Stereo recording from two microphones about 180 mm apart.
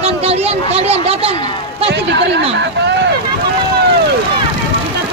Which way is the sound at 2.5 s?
85° right.